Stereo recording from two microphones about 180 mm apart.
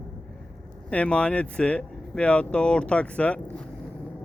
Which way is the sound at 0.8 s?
5° left (ahead or behind).